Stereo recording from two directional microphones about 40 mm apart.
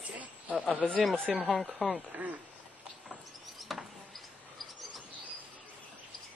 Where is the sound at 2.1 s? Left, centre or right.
Right.